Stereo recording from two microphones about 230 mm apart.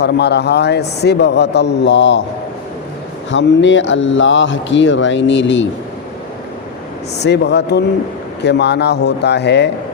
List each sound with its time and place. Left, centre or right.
0.0 s speech: left
3.3 s speech: left
7.2 s speech: left